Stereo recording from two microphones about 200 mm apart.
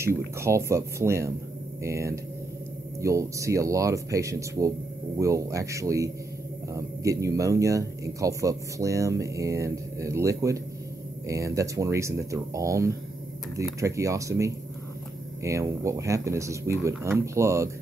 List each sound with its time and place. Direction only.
0.0 s speech: 15° right (ahead or behind)